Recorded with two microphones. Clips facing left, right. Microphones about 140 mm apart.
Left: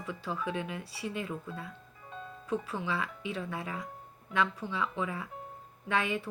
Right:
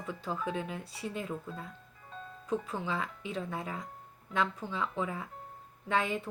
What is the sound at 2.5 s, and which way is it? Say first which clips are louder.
Speech: even; 25° right (ahead or behind).